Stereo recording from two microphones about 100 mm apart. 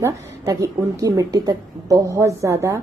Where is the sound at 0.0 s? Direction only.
35° right (ahead or behind).